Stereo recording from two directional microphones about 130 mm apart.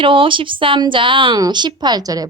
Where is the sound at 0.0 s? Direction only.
40° right (ahead or behind).